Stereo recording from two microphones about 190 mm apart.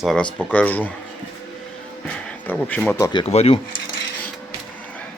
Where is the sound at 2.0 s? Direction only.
5° left (ahead or behind).